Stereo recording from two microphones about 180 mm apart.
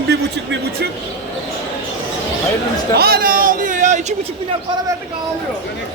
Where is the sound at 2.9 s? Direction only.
60° right (ahead or behind); by 4.1 s 40° right (ahead or behind).